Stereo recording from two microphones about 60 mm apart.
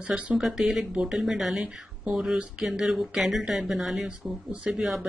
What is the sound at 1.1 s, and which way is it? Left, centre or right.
Speech, centre.